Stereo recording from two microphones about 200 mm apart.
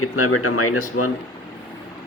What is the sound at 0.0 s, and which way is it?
Speech, 90° left.